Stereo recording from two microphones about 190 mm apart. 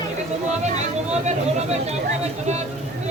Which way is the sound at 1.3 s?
35° right (ahead or behind).